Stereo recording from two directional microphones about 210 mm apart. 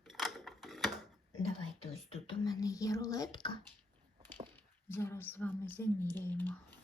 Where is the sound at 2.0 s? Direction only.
25° left (ahead or behind).